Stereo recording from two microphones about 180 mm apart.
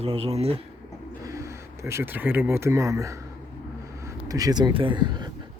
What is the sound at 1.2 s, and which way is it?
Speech, 15° right (ahead or behind).